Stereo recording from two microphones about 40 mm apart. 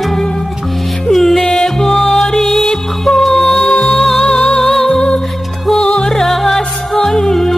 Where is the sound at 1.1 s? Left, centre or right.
Centre.